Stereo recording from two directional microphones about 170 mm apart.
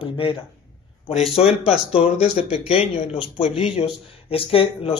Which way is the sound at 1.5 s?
5° right (ahead or behind).